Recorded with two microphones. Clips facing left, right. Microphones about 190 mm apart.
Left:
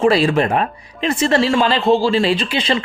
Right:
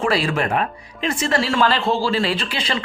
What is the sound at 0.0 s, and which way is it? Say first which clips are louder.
Speech: left 6 dB; 25° left (ahead or behind).